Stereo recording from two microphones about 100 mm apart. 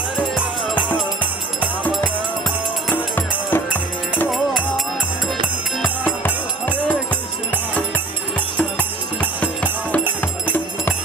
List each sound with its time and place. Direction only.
2.9 s music: 20° left (ahead or behind)
4.3 s music: centre (ahead or behind)
6.0 s music: 20° left (ahead or behind)
8.5 s music: 15° left (ahead or behind)